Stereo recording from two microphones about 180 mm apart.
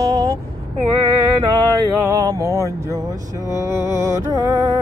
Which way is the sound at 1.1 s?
20° right (ahead or behind).